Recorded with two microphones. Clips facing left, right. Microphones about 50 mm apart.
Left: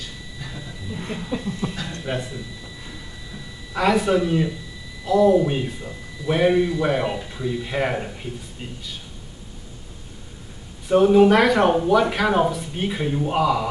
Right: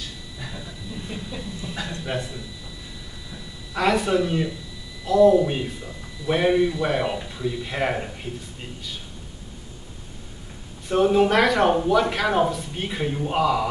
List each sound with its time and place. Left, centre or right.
0.5 s a sound: centre
2.0 s a man's voice: centre
3.7 s a man's voice: centre
10.9 s speech: centre